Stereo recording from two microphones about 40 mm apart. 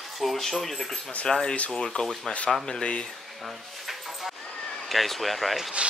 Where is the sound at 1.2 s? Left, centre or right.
Centre.